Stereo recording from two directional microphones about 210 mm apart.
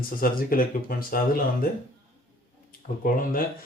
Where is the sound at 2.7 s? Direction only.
40° left (ahead or behind).